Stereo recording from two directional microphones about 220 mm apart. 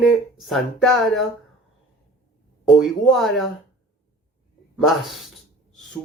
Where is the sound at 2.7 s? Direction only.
Centre (ahead or behind).